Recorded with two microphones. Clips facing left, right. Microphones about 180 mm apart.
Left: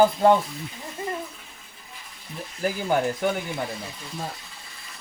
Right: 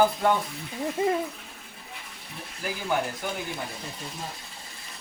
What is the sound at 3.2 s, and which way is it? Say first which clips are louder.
Speech: left 8 dB; 60° left (ahead or behind).